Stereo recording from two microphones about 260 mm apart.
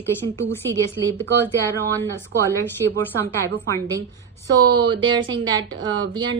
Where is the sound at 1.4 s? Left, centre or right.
Centre.